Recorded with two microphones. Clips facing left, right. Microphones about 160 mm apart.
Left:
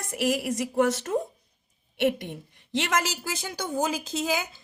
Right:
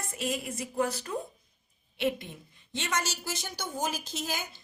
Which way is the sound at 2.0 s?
70° left (ahead or behind).